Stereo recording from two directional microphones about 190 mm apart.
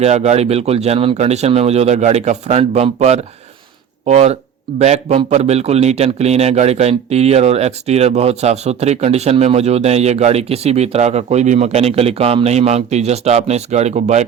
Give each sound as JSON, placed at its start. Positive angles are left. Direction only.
{"t": 0.0, "sound": "a man's voice", "side_deg": -35}